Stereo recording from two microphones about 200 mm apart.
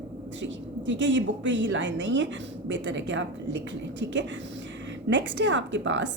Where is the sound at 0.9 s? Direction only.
65° right (ahead or behind).